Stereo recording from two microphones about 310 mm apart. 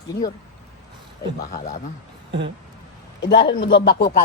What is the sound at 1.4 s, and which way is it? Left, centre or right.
Speech, left.